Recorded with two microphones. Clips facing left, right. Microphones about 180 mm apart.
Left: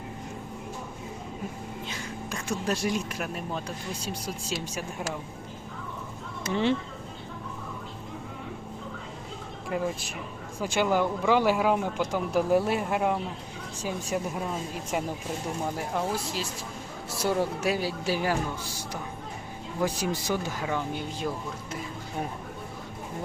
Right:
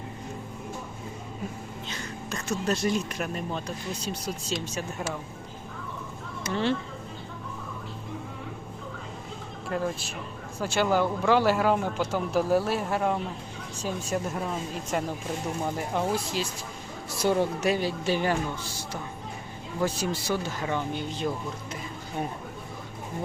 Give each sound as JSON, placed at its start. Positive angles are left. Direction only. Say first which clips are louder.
{"t": 1.9, "sound": "speech", "louder": "right 3 dB", "side_deg": 10}
{"t": 6.5, "sound": "speech", "louder": "left 1 dB", "side_deg": 15}
{"t": 9.6, "sound": "speech", "louder": "even", "side_deg": 10}
{"t": 19.8, "sound": "speech", "louder": "even", "side_deg": 15}